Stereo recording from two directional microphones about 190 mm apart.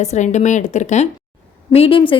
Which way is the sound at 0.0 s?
35° left (ahead or behind).